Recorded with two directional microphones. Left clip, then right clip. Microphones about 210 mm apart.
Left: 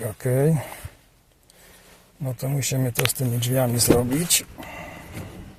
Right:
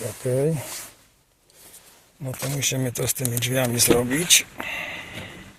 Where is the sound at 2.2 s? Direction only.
10° left (ahead or behind).